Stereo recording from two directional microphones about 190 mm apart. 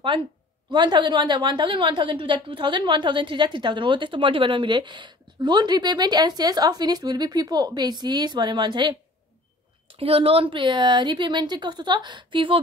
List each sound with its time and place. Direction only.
0.7 s a woman's voice: 20° right (ahead or behind)